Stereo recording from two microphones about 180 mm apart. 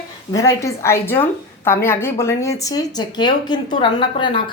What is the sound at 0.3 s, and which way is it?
A woman's voice, 20° left (ahead or behind).